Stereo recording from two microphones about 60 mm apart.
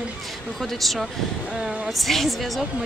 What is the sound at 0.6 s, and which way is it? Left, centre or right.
Speech, centre.